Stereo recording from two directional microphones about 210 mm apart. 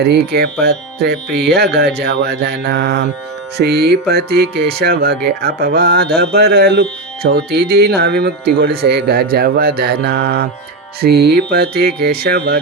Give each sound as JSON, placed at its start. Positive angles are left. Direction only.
{"t": 0.0, "sound": "speech", "side_deg": -50}